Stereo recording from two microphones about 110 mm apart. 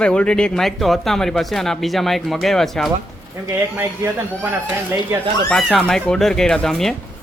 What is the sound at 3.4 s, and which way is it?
Speech, 25° right (ahead or behind).